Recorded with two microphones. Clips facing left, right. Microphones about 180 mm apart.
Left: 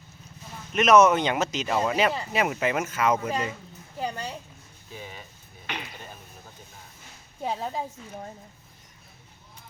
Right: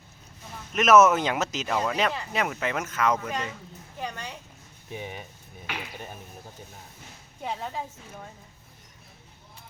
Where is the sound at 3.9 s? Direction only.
35° left (ahead or behind).